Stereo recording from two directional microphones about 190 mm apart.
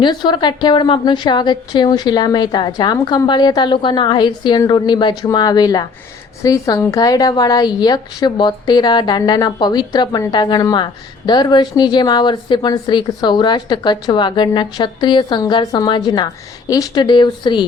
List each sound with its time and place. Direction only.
0.0 s a woman's voice: 25° left (ahead or behind)